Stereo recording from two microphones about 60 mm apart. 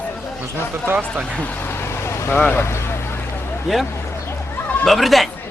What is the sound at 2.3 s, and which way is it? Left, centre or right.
Speech, left.